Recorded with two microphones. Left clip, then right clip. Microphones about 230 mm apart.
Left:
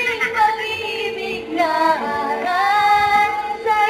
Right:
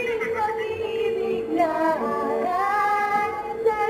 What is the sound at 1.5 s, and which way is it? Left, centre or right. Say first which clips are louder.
Music: left 6 dB; centre.